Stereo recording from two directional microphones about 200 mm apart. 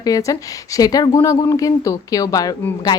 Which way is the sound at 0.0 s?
15° left (ahead or behind).